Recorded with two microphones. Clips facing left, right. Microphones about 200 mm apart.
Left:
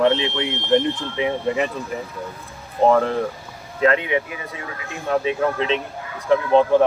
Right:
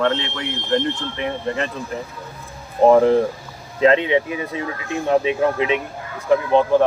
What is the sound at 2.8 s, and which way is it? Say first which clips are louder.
Speech: right 4 dB; 15° right (ahead or behind).